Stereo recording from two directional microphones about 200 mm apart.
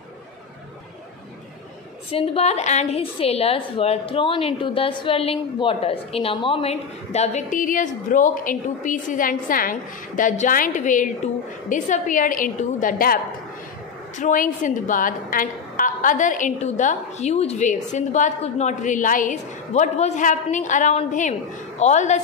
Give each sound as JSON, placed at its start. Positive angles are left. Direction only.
{"t": 2.0, "sound": "a woman's voice", "side_deg": 30}